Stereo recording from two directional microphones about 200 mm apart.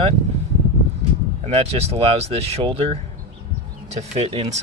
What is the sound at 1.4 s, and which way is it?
Speech, 30° right (ahead or behind).